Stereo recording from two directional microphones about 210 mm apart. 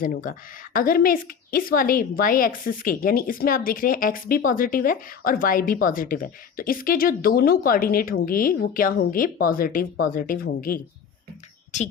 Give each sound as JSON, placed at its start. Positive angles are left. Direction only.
{"t": 0.0, "sound": "a woman's voice", "side_deg": 40}